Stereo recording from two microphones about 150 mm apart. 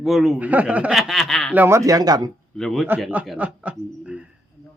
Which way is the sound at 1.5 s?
15° right (ahead or behind).